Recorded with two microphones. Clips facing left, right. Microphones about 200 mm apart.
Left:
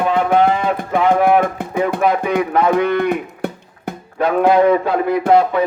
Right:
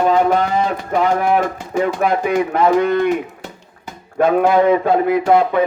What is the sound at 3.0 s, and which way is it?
Music, 55° left (ahead or behind).